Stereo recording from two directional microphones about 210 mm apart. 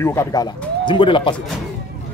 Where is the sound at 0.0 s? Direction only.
15° left (ahead or behind).